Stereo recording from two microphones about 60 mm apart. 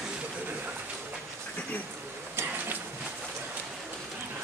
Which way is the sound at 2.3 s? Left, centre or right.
Right.